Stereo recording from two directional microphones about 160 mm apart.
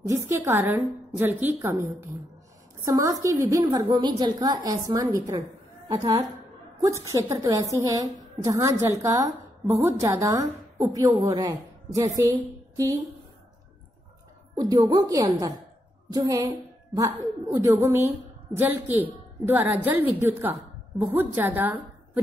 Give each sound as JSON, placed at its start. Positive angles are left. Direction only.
{"t": 0.1, "sound": "a woman's voice", "side_deg": -15}
{"t": 6.8, "sound": "a woman's voice", "side_deg": -20}
{"t": 14.5, "sound": "a woman's voice", "side_deg": -25}